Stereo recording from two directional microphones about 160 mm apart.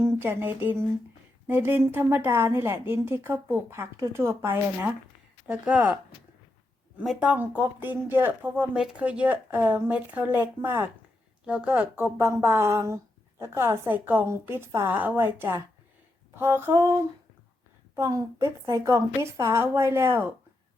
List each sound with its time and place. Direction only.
0.2 s speech: 15° right (ahead or behind)
7.0 s speech: 5° right (ahead or behind)